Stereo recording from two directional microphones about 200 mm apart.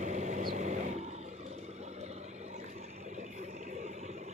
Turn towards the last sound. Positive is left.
turn(degrees=-35)  # may be behind; listen again after turning